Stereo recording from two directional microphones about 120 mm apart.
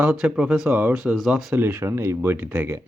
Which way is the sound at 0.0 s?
10° right (ahead or behind).